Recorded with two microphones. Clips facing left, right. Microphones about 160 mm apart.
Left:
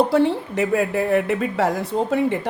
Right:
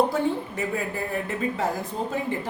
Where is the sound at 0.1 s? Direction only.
80° left.